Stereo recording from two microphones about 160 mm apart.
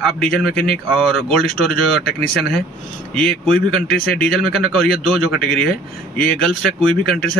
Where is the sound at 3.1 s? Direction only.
5° left (ahead or behind).